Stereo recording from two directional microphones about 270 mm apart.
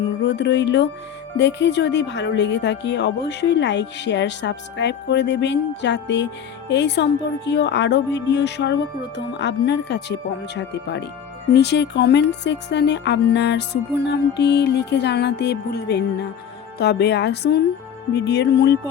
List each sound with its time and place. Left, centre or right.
0.2 s music: left
1.4 s speech: left